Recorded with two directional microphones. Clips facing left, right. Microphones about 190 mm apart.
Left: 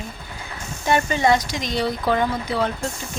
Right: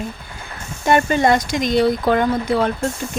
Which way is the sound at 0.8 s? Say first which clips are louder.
Right 3 dB; 55° right (ahead or behind).